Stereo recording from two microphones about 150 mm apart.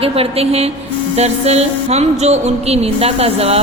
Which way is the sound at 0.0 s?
40° right (ahead or behind).